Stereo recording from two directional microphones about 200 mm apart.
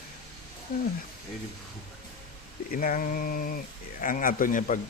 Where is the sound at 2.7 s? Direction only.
45° left (ahead or behind).